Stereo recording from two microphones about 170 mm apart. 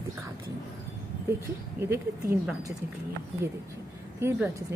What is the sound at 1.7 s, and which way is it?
Speech, 15° right (ahead or behind).